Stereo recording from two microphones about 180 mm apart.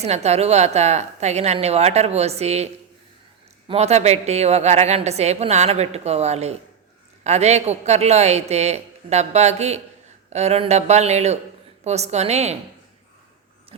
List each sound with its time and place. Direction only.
0.0 s a woman's voice: 35° right (ahead or behind)
3.7 s a woman's voice: 35° right (ahead or behind)